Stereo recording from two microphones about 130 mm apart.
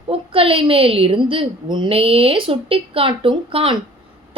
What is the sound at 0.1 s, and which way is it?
A woman's voice, 45° right (ahead or behind).